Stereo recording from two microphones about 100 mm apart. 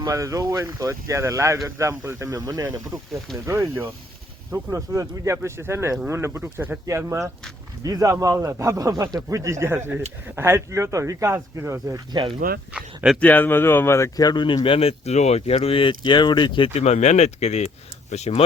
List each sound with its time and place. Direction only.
0.1 s speech: 35° right (ahead or behind)
7.9 s speech: 35° right (ahead or behind)
12.7 s dog: 10° right (ahead or behind)
13.1 s speech: 15° left (ahead or behind)
14.2 s speech: 45° left (ahead or behind)
16.6 s speech: 90° left